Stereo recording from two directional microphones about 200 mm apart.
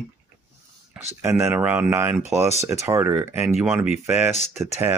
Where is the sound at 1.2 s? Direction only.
15° right (ahead or behind).